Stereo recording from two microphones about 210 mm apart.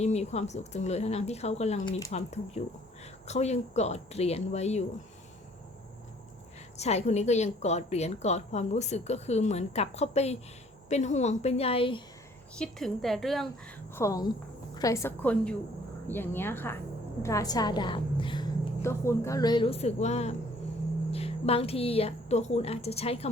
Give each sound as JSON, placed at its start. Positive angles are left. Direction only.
{"t": 0.0, "sound": "a woman's voice", "side_deg": 30}
{"t": 6.7, "sound": "a woman's voice", "side_deg": 30}
{"t": 12.5, "sound": "a woman's voice", "side_deg": 5}
{"t": 13.9, "sound": "a woman's voice", "side_deg": 15}
{"t": 18.8, "sound": "a woman's voice", "side_deg": 10}